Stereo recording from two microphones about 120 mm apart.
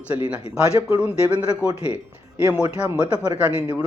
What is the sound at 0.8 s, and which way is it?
Speech, 15° right (ahead or behind).